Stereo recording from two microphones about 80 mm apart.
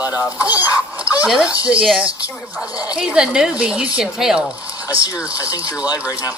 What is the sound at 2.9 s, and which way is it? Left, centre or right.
Speech, centre.